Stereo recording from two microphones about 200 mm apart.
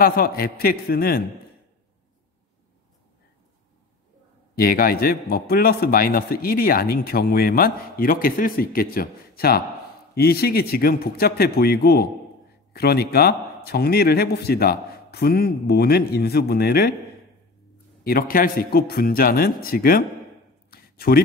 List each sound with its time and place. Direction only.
0.0 s a man's voice: 45° left (ahead or behind)
4.6 s a man's voice: 45° left (ahead or behind)
18.0 s a man's voice: 45° left (ahead or behind)
20.7 s a sound: 50° left (ahead or behind)